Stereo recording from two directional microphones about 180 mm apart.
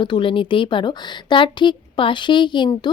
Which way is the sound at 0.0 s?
30° left (ahead or behind).